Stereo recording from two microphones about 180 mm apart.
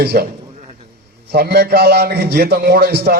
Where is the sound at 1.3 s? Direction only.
65° right (ahead or behind).